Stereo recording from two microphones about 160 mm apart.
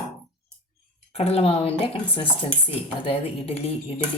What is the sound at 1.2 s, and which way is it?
Speech, 40° left (ahead or behind).